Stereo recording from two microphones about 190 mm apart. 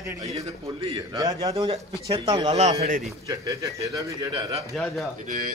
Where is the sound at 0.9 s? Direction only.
20° right (ahead or behind).